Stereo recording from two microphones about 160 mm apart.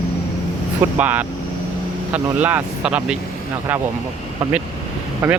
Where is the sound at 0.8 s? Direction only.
10° right (ahead or behind).